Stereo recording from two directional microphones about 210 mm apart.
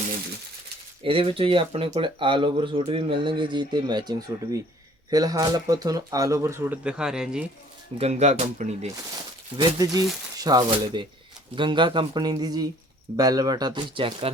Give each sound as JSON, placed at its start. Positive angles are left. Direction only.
{"t": 1.0, "sound": "speech", "side_deg": -25}
{"t": 7.9, "sound": "speech", "side_deg": -30}
{"t": 9.6, "sound": "speech", "side_deg": -15}